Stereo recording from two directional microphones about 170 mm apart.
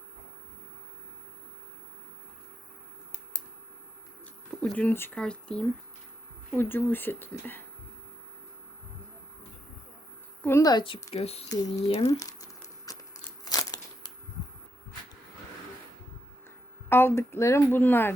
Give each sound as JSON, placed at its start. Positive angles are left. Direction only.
{"t": 4.6, "sound": "speech", "side_deg": 10}
{"t": 10.4, "sound": "a woman's voice", "side_deg": 20}
{"t": 11.4, "sound": "a woman's voice", "side_deg": 20}
{"t": 11.9, "sound": "speech", "side_deg": 35}
{"t": 12.1, "sound": "crumpling", "side_deg": 20}
{"t": 16.9, "sound": "speech", "side_deg": 15}